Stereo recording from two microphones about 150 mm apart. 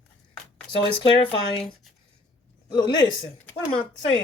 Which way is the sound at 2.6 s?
30° left (ahead or behind).